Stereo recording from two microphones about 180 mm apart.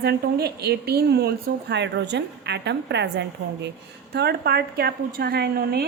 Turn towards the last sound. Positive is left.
turn(degrees=-60)  # may be behind; listen again after turning